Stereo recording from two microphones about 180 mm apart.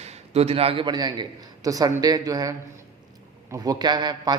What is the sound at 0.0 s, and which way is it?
A man's voice, 35° right (ahead or behind).